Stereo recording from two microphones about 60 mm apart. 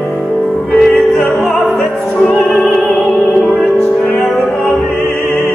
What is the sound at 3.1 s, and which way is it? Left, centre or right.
Music, centre.